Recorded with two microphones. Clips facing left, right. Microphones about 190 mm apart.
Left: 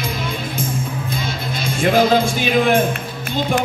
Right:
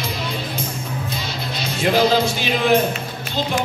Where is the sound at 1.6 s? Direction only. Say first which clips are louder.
Left 2 dB; 50° left (ahead or behind).